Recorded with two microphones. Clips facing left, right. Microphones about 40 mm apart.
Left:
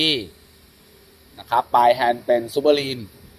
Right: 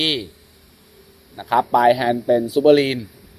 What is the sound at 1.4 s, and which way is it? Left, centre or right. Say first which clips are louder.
Speech: right 1 dB; centre.